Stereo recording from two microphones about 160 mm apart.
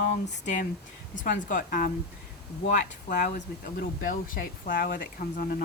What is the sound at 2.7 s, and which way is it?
Speech, 50° left (ahead or behind).